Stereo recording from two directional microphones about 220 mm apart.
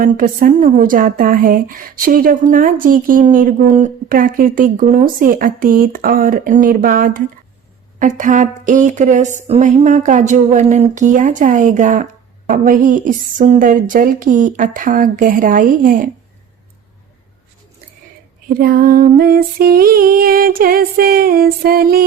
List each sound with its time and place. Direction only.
0.0 s a woman's voice: 40° right (ahead or behind)
18.4 s a woman's voice: 40° right (ahead or behind)